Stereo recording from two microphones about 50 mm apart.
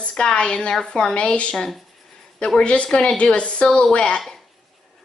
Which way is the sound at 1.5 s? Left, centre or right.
Centre.